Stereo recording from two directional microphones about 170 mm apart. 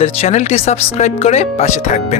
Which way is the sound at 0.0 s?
40° left (ahead or behind).